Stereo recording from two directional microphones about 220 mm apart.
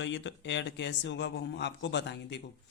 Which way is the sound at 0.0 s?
55° left (ahead or behind).